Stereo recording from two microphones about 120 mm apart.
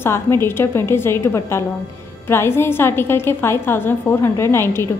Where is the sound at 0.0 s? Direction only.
20° left (ahead or behind).